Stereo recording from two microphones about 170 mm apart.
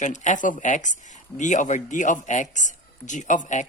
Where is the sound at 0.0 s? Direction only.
45° left (ahead or behind).